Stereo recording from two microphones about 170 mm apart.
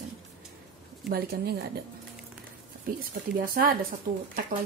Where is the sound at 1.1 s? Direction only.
65° right (ahead or behind).